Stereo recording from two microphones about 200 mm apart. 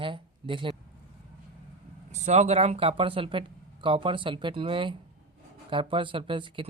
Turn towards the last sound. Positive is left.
turn(degrees=-25)  # may be behind; listen again after turning